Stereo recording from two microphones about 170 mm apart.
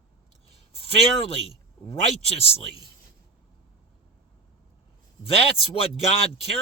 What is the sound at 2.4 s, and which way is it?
Speech, 35° left (ahead or behind).